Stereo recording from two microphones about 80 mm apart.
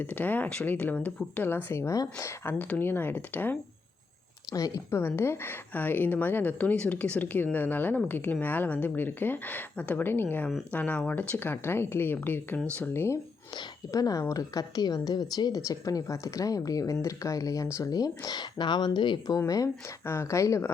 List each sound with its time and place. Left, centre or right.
0.0 s a woman's voice: left
4.5 s a woman's voice: left
4.9 s a woman's voice: left
13.9 s a woman's voice: left
19.5 s a woman's voice: left
20.1 s speech: left